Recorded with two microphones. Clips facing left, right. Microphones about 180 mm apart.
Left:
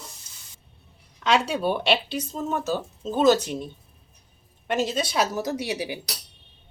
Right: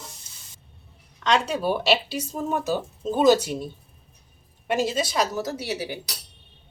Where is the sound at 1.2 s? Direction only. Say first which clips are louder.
Even; centre (ahead or behind).